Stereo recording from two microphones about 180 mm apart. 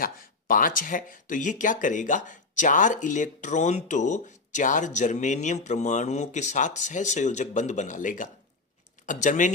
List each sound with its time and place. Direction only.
0.0 s speech: 50° left (ahead or behind)